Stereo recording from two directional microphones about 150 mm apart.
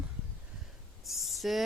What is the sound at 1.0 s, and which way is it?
Speech, centre (ahead or behind).